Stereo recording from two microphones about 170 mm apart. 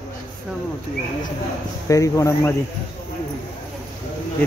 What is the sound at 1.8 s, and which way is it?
Speech, 20° left (ahead or behind).